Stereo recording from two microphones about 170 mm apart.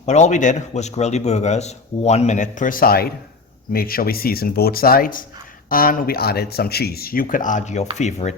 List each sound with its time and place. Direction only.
0.0 s a man's voice: 45° left (ahead or behind)